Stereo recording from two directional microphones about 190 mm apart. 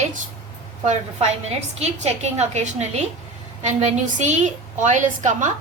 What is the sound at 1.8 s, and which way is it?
A woman's voice, 35° right (ahead or behind).